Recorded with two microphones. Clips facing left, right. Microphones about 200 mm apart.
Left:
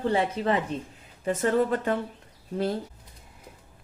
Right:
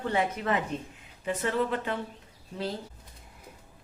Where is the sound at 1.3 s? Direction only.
45° left (ahead or behind).